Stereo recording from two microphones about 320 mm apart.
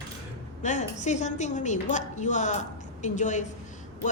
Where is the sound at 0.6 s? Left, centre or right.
Left.